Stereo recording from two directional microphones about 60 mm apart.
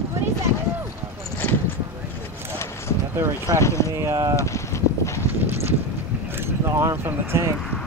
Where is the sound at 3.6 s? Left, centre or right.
Left.